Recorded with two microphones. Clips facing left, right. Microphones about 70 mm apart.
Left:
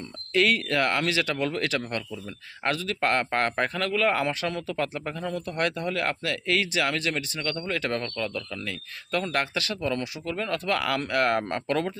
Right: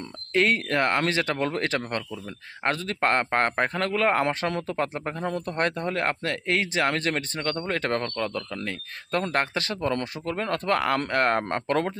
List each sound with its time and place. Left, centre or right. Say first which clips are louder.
0.3 s speech: right 1 dB; right